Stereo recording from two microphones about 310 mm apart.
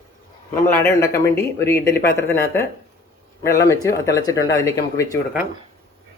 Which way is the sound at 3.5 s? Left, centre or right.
Centre.